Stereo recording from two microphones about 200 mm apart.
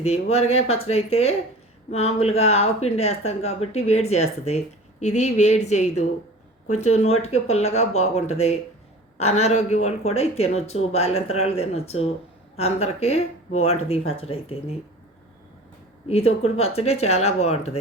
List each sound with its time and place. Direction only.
0.0 s speech: 30° left (ahead or behind)
16.0 s speech: 30° left (ahead or behind)